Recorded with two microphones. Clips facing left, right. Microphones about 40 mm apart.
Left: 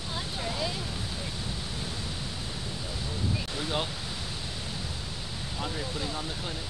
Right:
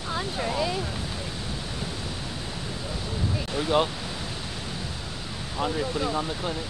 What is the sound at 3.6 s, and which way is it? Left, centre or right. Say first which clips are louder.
Speech: right 10 dB; right.